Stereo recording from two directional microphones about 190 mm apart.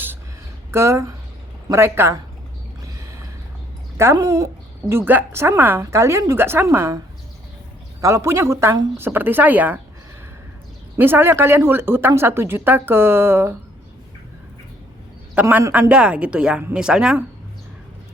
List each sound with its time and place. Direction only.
0.7 s a woman's voice: 15° right (ahead or behind)
2.8 s boat: 15° right (ahead or behind)
3.9 s a woman's voice: 15° right (ahead or behind)
8.0 s a woman's voice: 15° right (ahead or behind)
10.9 s a woman's voice: 10° right (ahead or behind)
15.4 s speech: 10° right (ahead or behind)